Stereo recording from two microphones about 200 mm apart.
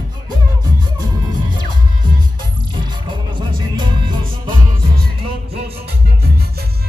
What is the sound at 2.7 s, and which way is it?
Music, 25° right (ahead or behind).